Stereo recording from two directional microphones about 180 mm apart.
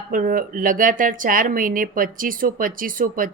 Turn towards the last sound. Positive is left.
turn(degrees=-50)  # may be behind; listen again after turning